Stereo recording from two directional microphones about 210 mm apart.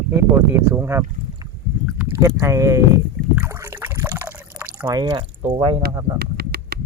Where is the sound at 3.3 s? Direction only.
10° right (ahead or behind).